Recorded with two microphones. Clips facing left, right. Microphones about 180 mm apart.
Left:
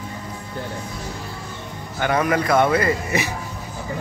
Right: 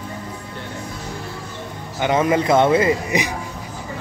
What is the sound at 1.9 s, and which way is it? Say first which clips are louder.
A man's voice: right 2 dB; 20° right (ahead or behind).